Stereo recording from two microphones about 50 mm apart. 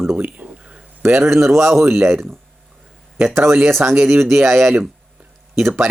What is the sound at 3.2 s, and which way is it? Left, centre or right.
Speech, right.